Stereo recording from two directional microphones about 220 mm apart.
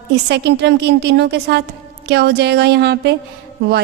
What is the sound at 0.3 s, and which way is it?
A woman's voice, 50° right (ahead or behind).